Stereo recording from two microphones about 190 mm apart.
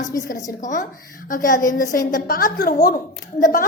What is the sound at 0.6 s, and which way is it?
A woman's voice, 40° left (ahead or behind).